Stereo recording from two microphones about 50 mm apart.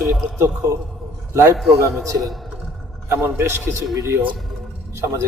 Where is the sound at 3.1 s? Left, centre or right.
Right.